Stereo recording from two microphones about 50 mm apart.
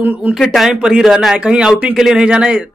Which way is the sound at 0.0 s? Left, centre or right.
Right.